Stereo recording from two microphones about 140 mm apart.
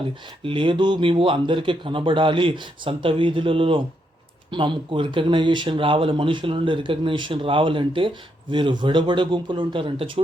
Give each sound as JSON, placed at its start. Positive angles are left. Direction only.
{"t": 0.4, "sound": "speech", "side_deg": -40}